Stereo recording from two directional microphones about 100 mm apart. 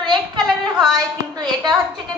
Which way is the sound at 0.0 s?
50° right (ahead or behind).